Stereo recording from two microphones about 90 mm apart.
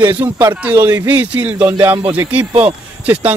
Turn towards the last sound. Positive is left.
turn(degrees=-15)  # may be behind; listen again after turning